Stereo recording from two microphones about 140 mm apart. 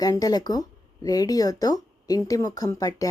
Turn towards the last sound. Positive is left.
turn(degrees=25)  # may be behind; listen again after turning